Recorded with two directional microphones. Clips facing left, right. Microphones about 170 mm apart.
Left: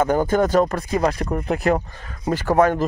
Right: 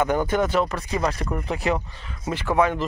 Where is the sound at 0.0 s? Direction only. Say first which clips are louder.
Left 3 dB; 40° left (ahead or behind).